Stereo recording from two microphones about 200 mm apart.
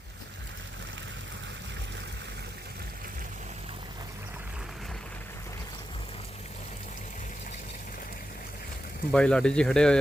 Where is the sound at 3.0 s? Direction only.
40° right (ahead or behind).